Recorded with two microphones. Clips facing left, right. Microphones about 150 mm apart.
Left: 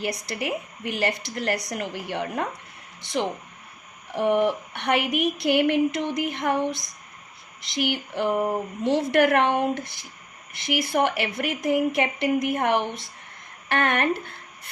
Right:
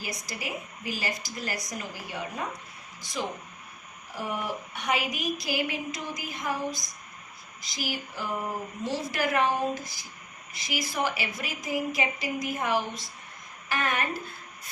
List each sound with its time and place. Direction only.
0.0 s a woman's voice: 65° left (ahead or behind)
7.6 s a woman's voice: 65° left (ahead or behind)